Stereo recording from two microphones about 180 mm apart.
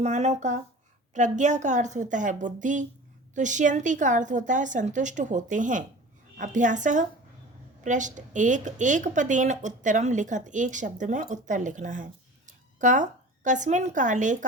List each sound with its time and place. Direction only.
0.0 s speech: 40° right (ahead or behind)